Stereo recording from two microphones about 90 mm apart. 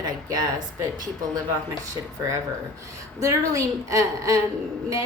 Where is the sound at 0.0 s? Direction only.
45° right (ahead or behind).